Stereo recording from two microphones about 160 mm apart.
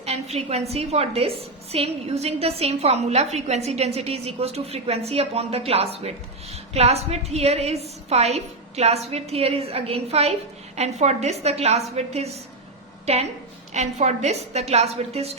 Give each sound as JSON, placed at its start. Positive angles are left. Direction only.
{"t": 0.0, "sound": "a woman's voice", "side_deg": -40}